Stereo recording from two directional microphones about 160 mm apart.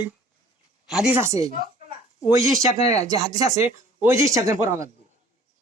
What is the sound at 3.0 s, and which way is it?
Speech, 20° right (ahead or behind).